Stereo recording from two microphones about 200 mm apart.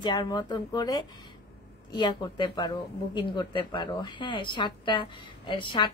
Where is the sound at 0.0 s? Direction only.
20° left (ahead or behind).